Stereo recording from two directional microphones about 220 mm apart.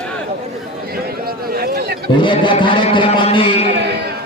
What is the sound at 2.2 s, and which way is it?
A man's voice, 20° left (ahead or behind).